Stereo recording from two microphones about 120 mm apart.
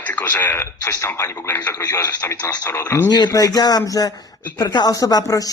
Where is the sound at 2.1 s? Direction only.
15° left (ahead or behind).